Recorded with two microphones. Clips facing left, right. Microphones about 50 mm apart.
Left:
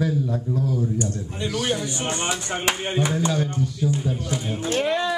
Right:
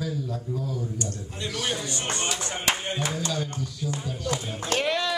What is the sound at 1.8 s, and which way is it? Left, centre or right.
A man's voice, left.